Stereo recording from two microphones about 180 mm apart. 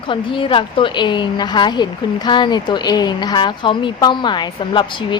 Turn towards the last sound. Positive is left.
turn(degrees=25)  # may be behind; listen again after turning